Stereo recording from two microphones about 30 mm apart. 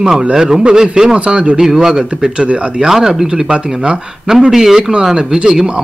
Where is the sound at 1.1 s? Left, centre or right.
Right.